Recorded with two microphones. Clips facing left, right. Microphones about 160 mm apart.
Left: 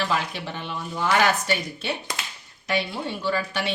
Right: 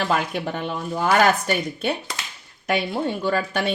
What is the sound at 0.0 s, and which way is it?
Speech, 50° right (ahead or behind).